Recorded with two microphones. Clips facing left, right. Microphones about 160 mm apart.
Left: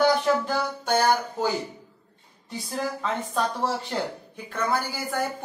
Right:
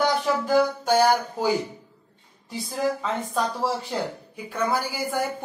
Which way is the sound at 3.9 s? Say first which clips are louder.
Right 1 dB; 5° right (ahead or behind).